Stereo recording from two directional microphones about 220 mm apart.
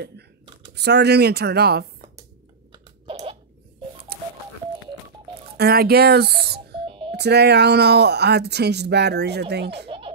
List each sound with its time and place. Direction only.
0.7 s speech: 50° right (ahead or behind)
3.1 s a sound: 25° right (ahead or behind)
4.1 s telephone dialing: 45° right (ahead or behind)
5.6 s speech: 45° right (ahead or behind)
9.8 s music: 25° right (ahead or behind)